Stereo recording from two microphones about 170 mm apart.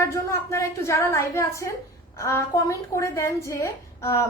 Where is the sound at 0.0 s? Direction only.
15° left (ahead or behind).